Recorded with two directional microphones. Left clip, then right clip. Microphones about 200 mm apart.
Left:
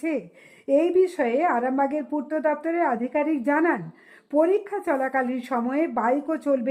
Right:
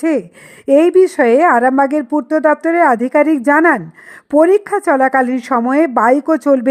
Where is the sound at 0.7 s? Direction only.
35° right (ahead or behind).